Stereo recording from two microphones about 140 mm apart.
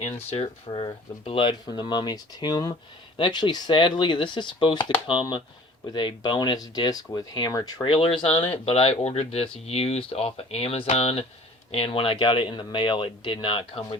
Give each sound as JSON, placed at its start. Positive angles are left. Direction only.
{"t": 0.0, "sound": "speech", "side_deg": 45}
{"t": 0.4, "sound": "speech", "side_deg": 35}
{"t": 7.9, "sound": "speech", "side_deg": 40}